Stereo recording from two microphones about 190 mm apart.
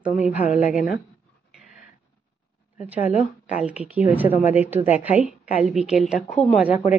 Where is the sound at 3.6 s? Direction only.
5° right (ahead or behind).